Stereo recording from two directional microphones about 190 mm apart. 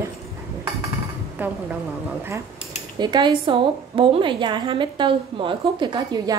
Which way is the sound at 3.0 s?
20° right (ahead or behind).